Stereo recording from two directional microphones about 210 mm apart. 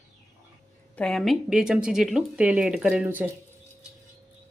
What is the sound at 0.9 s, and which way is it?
Speech, 5° left (ahead or behind).